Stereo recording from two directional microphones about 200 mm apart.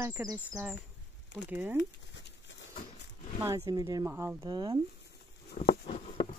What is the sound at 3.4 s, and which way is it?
Speech, 15° right (ahead or behind).